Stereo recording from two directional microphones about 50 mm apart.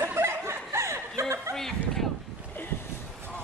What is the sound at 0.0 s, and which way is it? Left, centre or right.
Chuckle, right.